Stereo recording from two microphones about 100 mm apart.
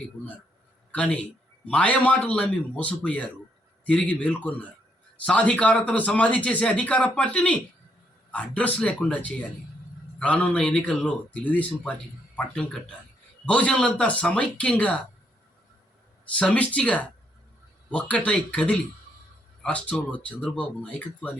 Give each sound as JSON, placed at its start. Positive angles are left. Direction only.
{"t": 0.9, "sound": "a man's voice", "side_deg": 15}
{"t": 16.3, "sound": "a man's voice", "side_deg": 15}